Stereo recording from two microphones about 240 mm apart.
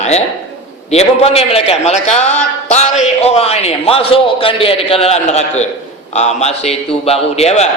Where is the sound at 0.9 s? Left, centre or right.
Left.